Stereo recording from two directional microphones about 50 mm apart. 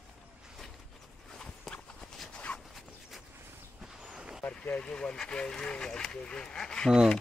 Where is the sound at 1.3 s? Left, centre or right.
Centre.